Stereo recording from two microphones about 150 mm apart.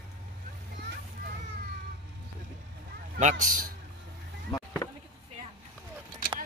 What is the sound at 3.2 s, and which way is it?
Speech, 60° right (ahead or behind).